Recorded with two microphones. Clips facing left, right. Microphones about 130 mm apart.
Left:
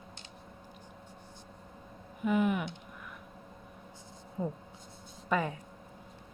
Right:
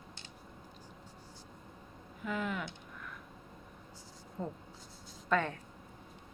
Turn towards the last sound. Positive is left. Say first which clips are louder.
# left 1 dB
turn(degrees=10)  # may be behind; listen again after turning